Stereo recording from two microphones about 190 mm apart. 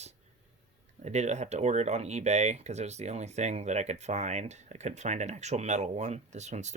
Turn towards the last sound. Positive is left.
turn(degrees=-35)  # may be behind; listen again after turning